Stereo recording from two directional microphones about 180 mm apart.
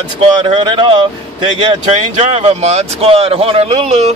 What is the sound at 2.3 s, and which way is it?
Speech, 35° right (ahead or behind).